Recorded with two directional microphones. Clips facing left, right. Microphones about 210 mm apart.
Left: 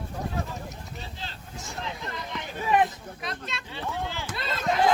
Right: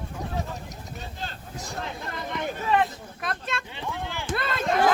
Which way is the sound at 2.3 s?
55° right (ahead or behind).